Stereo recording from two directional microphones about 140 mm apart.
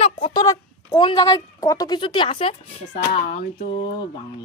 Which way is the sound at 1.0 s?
30° left (ahead or behind).